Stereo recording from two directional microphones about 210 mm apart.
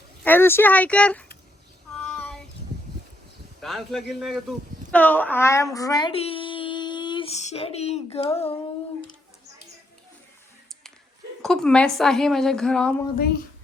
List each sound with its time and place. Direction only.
0.3 s speech: 10° left (ahead or behind)
3.6 s speech: centre (ahead or behind); by 8.5 s 30° left (ahead or behind)
11.4 s a woman's voice: centre (ahead or behind)